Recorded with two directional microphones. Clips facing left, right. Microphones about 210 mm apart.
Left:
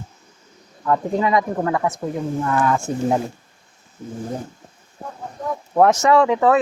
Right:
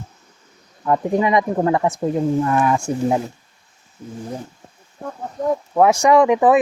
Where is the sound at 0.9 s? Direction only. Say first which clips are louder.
Right 2 dB; 15° right (ahead or behind).